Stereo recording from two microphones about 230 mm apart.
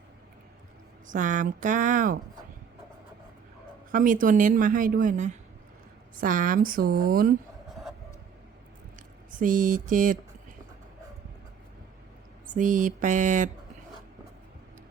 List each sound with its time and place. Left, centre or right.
1.1 s a woman's voice: right
3.9 s a woman's voice: right
9.3 s a woman's voice: right
12.5 s a woman's voice: right